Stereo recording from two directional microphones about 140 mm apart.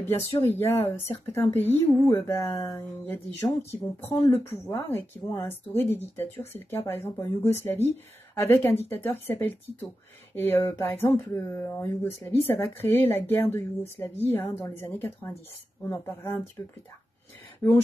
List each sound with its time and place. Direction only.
0.0 s speech: 20° left (ahead or behind)